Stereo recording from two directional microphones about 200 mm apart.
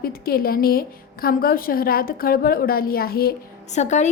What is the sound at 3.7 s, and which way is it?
Speech, 35° left (ahead or behind).